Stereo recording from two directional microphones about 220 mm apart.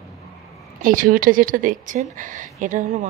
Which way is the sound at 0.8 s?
40° right (ahead or behind).